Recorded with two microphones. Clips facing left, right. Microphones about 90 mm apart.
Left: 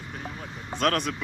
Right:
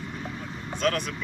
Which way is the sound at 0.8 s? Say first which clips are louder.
Left 2 dB; 60° left (ahead or behind).